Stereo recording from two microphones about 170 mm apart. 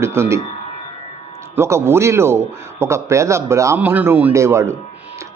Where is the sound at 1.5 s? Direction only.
15° right (ahead or behind).